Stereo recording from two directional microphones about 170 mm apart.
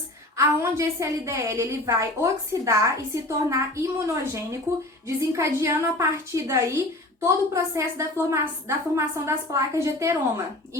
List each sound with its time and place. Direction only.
0.3 s a woman's voice: 15° right (ahead or behind)